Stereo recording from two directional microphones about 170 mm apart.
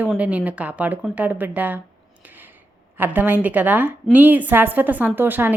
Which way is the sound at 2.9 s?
10° right (ahead or behind).